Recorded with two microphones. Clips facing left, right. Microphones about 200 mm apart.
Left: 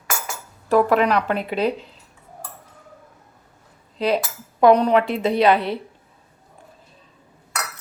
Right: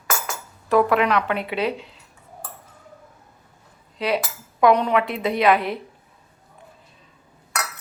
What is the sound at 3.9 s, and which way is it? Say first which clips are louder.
Cutlery: left 3 dB; 35° left (ahead or behind).